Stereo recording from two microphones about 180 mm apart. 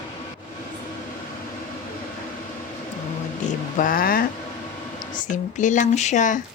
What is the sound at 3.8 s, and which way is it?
Speech, 50° left (ahead or behind).